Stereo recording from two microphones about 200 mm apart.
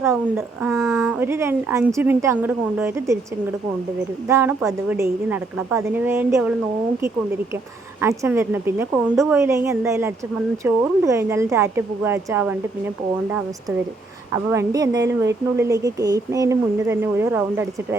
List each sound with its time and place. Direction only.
0.0 s speech: 10° right (ahead or behind)
1.0 s speech: 10° right (ahead or behind)
4.3 s speech: 15° right (ahead or behind)
8.0 s speech: 15° right (ahead or behind)
14.3 s speech: 15° right (ahead or behind)